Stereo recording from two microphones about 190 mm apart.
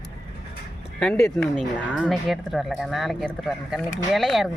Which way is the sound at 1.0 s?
5° left (ahead or behind).